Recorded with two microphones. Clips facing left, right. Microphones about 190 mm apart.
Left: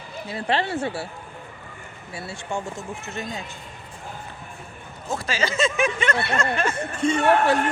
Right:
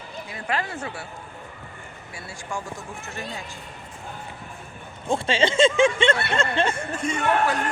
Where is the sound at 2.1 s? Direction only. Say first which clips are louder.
Left 4 dB; 25° left (ahead or behind).